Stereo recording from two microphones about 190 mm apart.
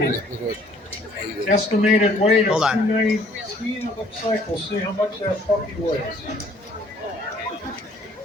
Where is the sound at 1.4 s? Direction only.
40° left (ahead or behind).